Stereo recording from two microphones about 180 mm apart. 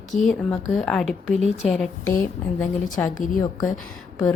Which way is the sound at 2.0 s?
15° left (ahead or behind).